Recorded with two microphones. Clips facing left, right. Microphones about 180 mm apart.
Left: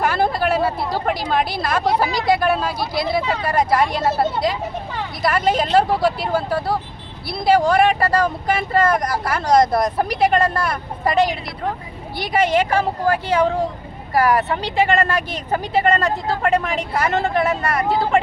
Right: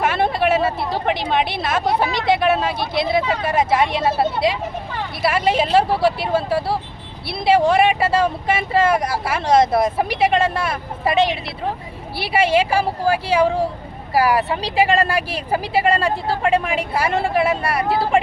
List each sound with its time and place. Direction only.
0.0 s a sound: centre (ahead or behind)
1.0 s speech: centre (ahead or behind)
8.0 s speech: 25° right (ahead or behind)
8.4 s speech: 5° right (ahead or behind)
12.2 s speech: 10° right (ahead or behind)